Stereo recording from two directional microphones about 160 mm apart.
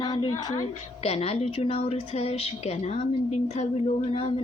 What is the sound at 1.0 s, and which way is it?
A woman's voice, 40° left (ahead or behind).